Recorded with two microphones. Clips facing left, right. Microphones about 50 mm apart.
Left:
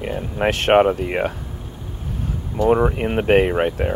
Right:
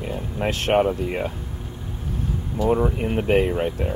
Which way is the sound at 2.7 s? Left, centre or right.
Left.